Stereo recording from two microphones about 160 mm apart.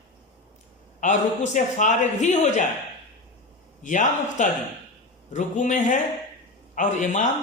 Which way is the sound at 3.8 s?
50° left (ahead or behind).